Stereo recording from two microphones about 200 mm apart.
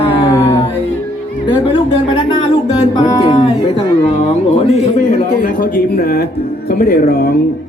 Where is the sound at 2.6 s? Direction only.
20° left (ahead or behind).